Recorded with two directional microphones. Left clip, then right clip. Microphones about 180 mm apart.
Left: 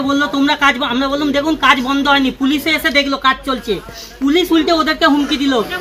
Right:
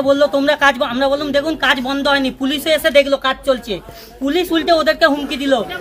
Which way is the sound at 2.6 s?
30° right (ahead or behind).